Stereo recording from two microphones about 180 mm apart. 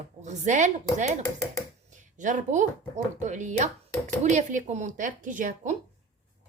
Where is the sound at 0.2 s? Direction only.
40° right (ahead or behind).